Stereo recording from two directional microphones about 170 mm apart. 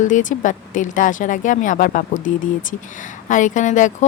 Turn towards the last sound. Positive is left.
turn(degrees=45)  # may be behind; listen again after turning